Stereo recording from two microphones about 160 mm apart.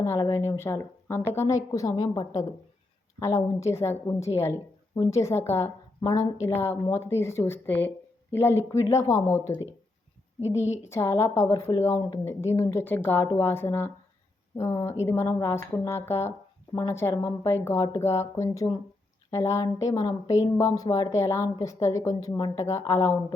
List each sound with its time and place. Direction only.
0.0 s a woman's voice: 15° left (ahead or behind)
6.0 s speech: 30° left (ahead or behind)
6.6 s a woman's voice: 15° left (ahead or behind)
10.8 s a woman's voice: 15° left (ahead or behind)